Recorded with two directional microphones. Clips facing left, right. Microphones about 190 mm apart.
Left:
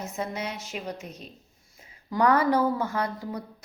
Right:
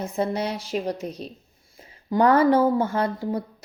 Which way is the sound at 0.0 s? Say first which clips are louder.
Right 7 dB; 35° right (ahead or behind).